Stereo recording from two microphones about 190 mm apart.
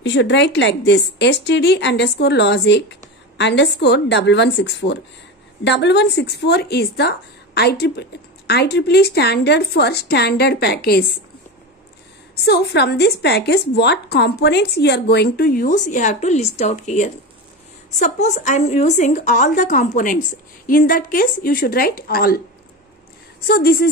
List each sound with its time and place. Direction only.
0.0 s a woman's voice: 70° left (ahead or behind); by 11.1 s 55° left (ahead or behind)
12.4 s a woman's voice: 60° left (ahead or behind)
23.4 s a woman's voice: 55° left (ahead or behind)